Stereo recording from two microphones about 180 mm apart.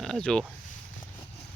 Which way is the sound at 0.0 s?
5° left (ahead or behind).